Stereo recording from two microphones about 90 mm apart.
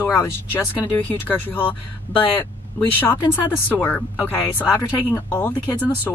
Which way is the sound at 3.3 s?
20° left (ahead or behind).